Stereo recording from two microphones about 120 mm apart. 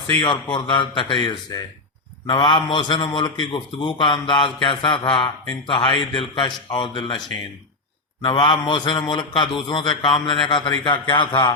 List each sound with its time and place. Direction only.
0.2 s a man's voice: 40° left (ahead or behind)
8.2 s a man's voice: 40° left (ahead or behind)